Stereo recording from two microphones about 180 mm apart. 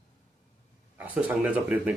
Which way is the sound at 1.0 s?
10° right (ahead or behind).